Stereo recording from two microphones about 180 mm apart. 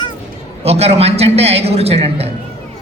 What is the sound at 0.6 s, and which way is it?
A man's voice, 35° right (ahead or behind).